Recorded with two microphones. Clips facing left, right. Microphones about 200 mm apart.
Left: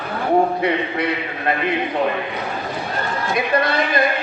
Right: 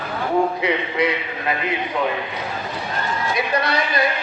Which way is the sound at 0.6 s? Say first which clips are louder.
Even; 55° left (ahead or behind).